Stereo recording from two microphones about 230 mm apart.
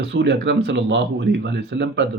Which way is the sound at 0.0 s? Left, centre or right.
Right.